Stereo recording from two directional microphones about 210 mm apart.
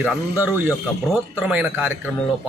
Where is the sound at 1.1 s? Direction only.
5° right (ahead or behind).